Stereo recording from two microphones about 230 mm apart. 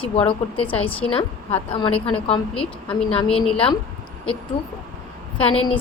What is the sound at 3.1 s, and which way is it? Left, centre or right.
Speech, left.